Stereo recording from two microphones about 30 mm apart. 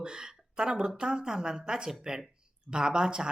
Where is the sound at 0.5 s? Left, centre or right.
Right.